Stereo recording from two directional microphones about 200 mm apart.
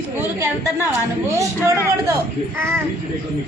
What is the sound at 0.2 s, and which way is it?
A woman's voice, 10° right (ahead or behind).